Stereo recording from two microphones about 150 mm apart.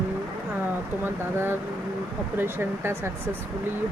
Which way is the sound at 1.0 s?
15° right (ahead or behind).